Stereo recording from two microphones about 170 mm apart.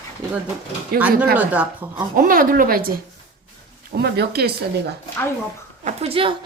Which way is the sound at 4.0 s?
70° right (ahead or behind).